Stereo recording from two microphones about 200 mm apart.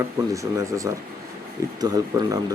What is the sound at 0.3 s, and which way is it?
Speech, 15° right (ahead or behind).